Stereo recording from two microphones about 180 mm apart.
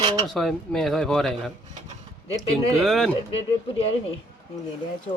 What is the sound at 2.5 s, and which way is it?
Speech, centre (ahead or behind).